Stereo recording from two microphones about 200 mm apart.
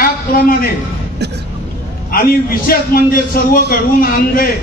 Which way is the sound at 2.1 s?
45° left (ahead or behind).